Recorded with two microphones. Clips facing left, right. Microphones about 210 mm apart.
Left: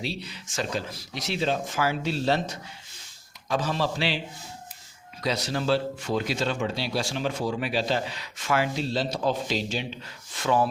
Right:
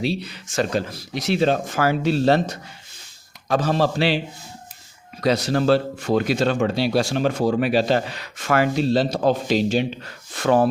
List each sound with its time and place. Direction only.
0.0 s speech: 65° right (ahead or behind)
5.2 s speech: 60° right (ahead or behind)